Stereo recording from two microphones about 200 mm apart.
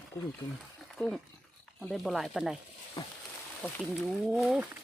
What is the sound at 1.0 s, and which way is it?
Speech, 5° left (ahead or behind).